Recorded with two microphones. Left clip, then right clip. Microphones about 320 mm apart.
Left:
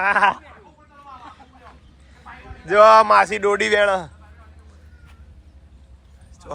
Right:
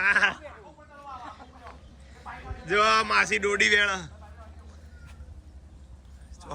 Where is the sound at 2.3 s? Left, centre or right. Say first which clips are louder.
Even; right.